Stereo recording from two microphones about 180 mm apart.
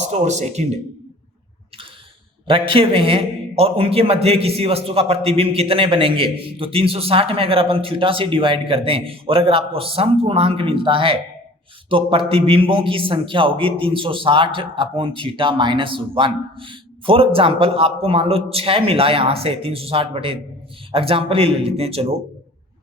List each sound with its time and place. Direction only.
0.1 s a man's voice: 40° right (ahead or behind)
2.5 s a man's voice: 30° right (ahead or behind)